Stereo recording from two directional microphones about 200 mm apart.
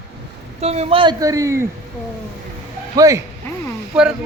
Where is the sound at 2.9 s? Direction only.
15° right (ahead or behind).